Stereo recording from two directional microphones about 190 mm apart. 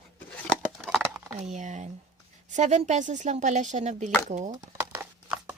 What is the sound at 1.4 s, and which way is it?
Speech, 35° right (ahead or behind).